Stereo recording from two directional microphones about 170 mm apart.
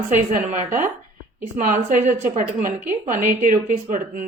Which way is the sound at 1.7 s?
45° right (ahead or behind).